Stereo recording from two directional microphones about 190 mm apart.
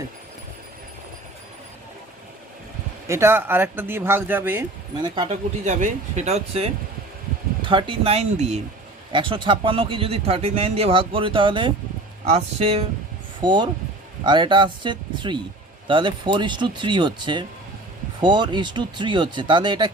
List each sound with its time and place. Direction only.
3.1 s speech: 15° right (ahead or behind)
5.0 s speech: 25° right (ahead or behind)